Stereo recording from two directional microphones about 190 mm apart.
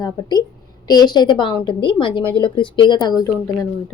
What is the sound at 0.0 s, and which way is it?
A woman's voice, 20° left (ahead or behind).